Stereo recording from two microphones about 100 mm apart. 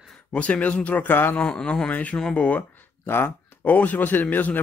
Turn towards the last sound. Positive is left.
turn(degrees=15)  # may be behind; listen again after turning